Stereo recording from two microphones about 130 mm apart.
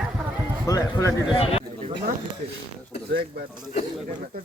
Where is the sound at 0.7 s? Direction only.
25° left (ahead or behind).